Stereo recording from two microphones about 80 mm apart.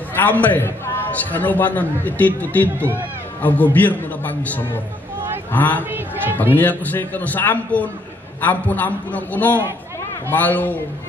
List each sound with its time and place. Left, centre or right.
0.2 s a man's voice: left
5.9 s a sound: right
6.5 s a man's voice: left